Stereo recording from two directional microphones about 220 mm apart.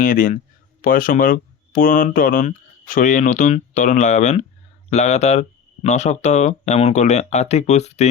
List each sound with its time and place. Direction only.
0.0 s speech: 40° left (ahead or behind)